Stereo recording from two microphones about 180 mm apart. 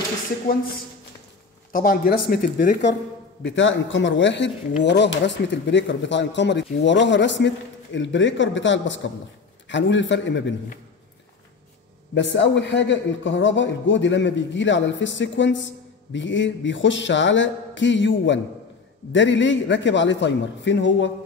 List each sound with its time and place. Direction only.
1.7 s speech: 50° left (ahead or behind)
3.4 s a man's voice: 90° left
4.8 s a man's voice: 75° left (ahead or behind)
12.1 s a man's voice: 85° left